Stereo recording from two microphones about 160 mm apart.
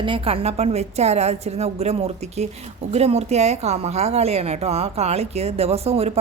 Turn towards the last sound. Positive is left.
turn(degrees=-40)  # may be behind; listen again after turning